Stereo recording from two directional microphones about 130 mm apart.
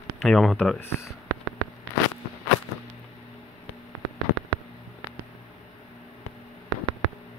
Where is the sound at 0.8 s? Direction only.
20° left (ahead or behind).